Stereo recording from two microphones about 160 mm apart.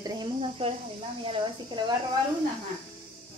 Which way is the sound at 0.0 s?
30° right (ahead or behind).